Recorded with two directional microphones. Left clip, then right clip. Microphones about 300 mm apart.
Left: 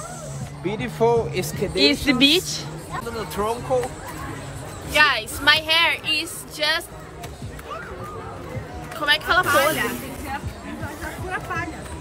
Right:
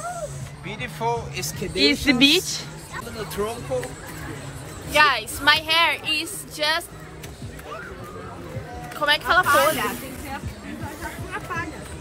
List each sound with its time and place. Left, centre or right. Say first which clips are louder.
0.7 s speech: left 6 dB; left
1.8 s speech: even; centre
3.2 s speech: left 3 dB; left
4.9 s a woman's voice: even; centre
9.0 s a woman's voice: even; centre